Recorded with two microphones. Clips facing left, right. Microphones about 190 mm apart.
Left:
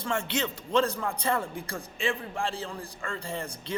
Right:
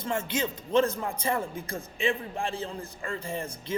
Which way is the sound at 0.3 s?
15° right (ahead or behind).